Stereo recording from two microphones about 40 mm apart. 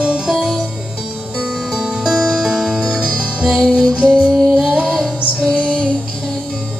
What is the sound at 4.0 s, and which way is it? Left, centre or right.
Music, right.